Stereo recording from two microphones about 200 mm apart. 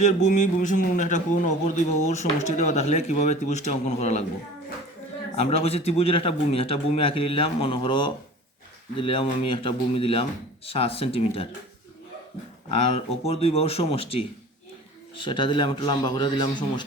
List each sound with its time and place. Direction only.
0.0 s a man's voice: 35° left (ahead or behind)
5.4 s a man's voice: 30° left (ahead or behind)
12.6 s a man's voice: 30° left (ahead or behind)